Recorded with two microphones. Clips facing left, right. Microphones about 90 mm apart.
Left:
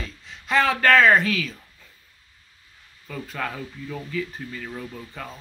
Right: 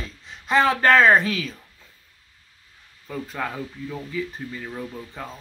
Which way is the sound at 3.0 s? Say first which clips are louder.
Right 1 dB; 15° right (ahead or behind).